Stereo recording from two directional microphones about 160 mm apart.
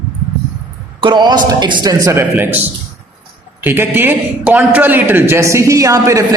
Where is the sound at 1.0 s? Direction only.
30° right (ahead or behind).